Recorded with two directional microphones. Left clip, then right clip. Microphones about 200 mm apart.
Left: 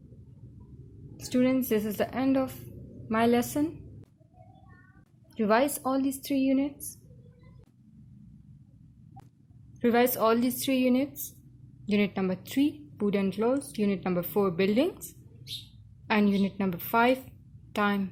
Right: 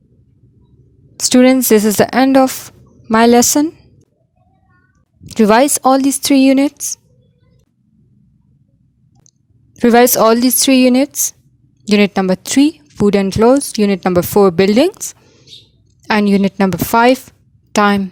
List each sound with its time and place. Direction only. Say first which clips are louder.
1.1 s speech: right 17 dB; 50° right (ahead or behind)
5.3 s speech: right 15 dB; 50° right (ahead or behind)
9.8 s a woman's voice: right 15 dB; 50° right (ahead or behind)